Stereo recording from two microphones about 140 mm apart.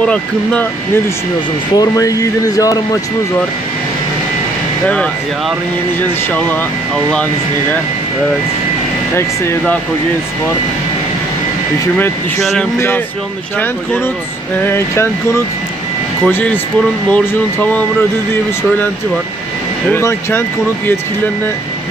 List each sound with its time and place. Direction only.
0.0 s speech: 10° left (ahead or behind)
1.8 s speech: 25° left (ahead or behind)
4.8 s speech: 5° left (ahead or behind)
9.1 s speech: 15° left (ahead or behind)
12.7 s speech: 20° left (ahead or behind)
14.6 s speech: 15° left (ahead or behind)
16.3 s speech: 15° left (ahead or behind)
19.9 s speech: 15° left (ahead or behind)